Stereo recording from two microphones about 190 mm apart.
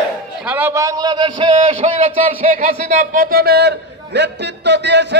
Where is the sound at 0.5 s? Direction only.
10° right (ahead or behind).